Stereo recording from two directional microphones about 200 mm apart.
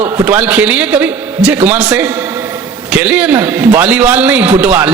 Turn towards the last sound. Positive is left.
turn(degrees=-10)  # may be behind; listen again after turning